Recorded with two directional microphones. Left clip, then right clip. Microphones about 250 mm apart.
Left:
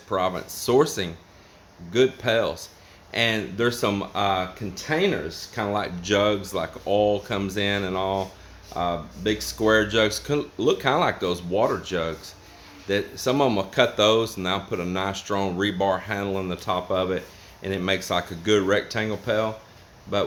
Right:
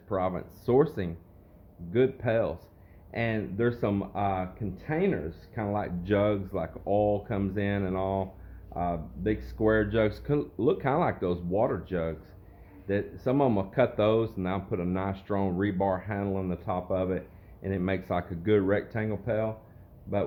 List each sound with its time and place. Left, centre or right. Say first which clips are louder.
0.1 s speech: left 5 dB; centre